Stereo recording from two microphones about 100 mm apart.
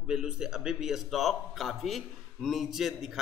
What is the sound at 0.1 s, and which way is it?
A man's voice, 5° right (ahead or behind).